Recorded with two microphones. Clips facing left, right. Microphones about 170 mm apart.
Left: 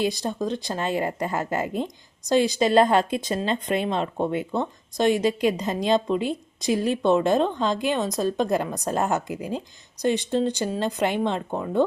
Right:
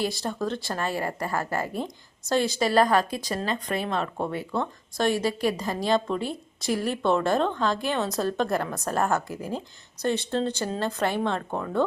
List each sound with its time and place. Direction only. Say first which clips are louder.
0.0 s a woman's voice: left 3 dB; 20° left (ahead or behind)